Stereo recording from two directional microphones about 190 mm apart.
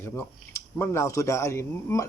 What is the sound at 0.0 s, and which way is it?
Speech, 15° left (ahead or behind).